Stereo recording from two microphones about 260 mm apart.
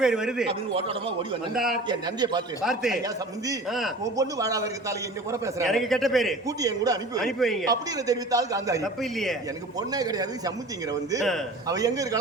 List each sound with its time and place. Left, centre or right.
0.0 s speech: centre
1.5 s speech: centre
1.9 s a man's voice: centre
2.6 s speech: centre
4.2 s a man's voice: centre
5.6 s speech: centre
6.6 s a man's voice: centre
7.2 s speech: centre
7.7 s a man's voice: centre
9.0 s speech: centre
9.9 s a man's voice: centre
11.7 s a man's voice: centre